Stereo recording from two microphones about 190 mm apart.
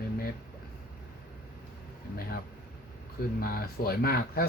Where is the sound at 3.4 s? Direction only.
50° left (ahead or behind).